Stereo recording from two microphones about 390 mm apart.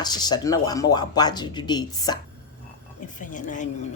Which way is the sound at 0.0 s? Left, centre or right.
Centre.